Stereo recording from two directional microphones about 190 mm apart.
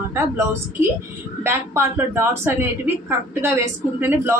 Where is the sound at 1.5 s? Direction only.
15° right (ahead or behind).